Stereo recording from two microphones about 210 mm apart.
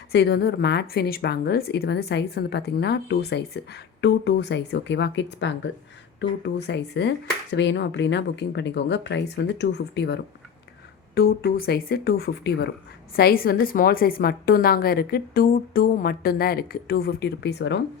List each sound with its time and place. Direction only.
0.1 s a woman's voice: 50° left (ahead or behind)